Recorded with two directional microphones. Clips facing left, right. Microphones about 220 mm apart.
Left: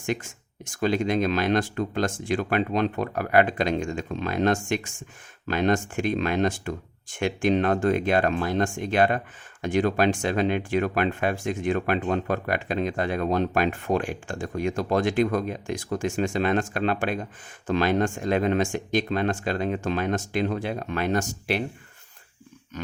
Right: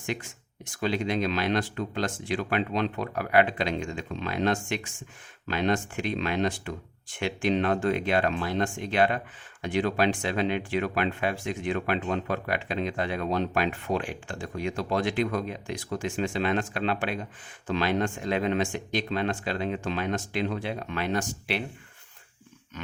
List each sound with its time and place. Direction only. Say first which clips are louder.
0.0 s speech: left 4 dB; 45° left (ahead or behind)